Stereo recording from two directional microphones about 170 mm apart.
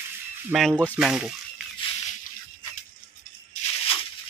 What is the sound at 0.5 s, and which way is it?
Speech, centre (ahead or behind).